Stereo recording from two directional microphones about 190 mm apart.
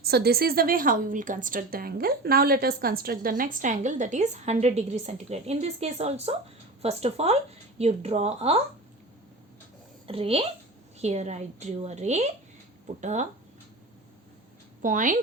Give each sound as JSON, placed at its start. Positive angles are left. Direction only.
{"t": 0.0, "sound": "a woman's voice", "side_deg": -55}
{"t": 10.1, "sound": "a woman's voice", "side_deg": -30}
{"t": 14.8, "sound": "a woman's voice", "side_deg": -45}